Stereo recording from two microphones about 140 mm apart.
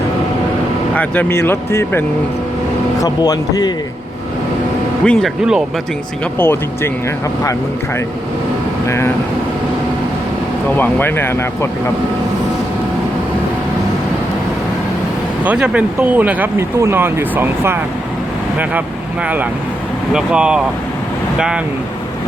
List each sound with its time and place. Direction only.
0.9 s speech: 10° left (ahead or behind)
3.0 s speech: 25° left (ahead or behind)
5.0 s speech: centre (ahead or behind)
6.4 s speech: 15° left (ahead or behind)
8.9 s speech: 20° left (ahead or behind)
10.8 s speech: 15° left (ahead or behind)
15.4 s speech: 10° right (ahead or behind)
20.1 s speech: 5° right (ahead or behind)